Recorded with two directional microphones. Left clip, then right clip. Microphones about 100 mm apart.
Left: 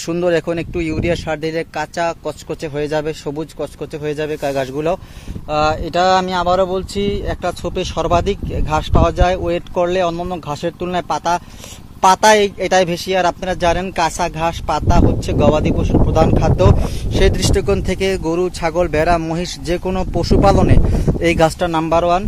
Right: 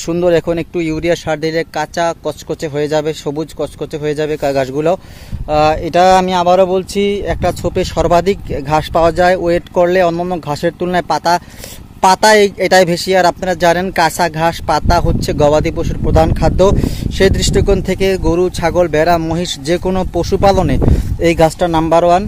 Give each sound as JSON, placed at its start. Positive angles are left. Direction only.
{"t": 0.0, "sound": "speech", "side_deg": -30}
{"t": 16.2, "sound": "speech", "side_deg": -45}
{"t": 19.6, "sound": "speech", "side_deg": -35}
{"t": 21.5, "sound": "speech", "side_deg": -40}